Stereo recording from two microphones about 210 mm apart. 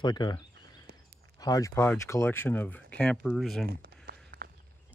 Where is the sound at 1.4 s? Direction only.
15° left (ahead or behind).